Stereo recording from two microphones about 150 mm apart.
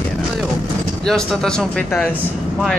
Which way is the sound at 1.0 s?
5° left (ahead or behind).